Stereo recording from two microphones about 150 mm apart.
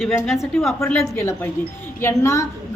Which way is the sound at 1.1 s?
20° left (ahead or behind).